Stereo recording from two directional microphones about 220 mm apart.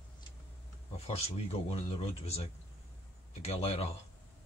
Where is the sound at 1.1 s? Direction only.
30° left (ahead or behind).